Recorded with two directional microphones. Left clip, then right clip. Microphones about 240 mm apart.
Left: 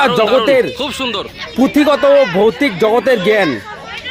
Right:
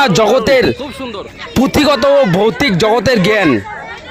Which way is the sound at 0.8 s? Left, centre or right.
Centre.